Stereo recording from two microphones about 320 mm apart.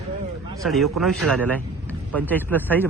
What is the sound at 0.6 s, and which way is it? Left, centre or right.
A man's voice, centre.